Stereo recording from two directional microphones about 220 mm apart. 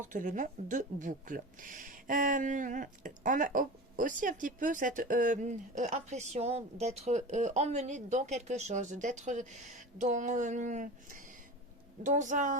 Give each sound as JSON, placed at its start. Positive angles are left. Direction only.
{"t": 0.0, "sound": "speech", "side_deg": -35}